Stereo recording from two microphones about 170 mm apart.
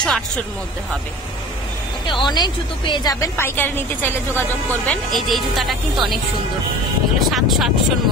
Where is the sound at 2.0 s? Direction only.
25° left (ahead or behind).